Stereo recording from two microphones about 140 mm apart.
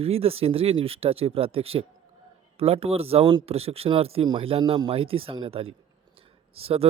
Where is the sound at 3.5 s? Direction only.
45° right (ahead or behind).